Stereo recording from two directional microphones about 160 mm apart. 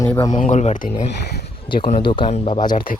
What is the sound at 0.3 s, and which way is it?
Speech, 50° left (ahead or behind).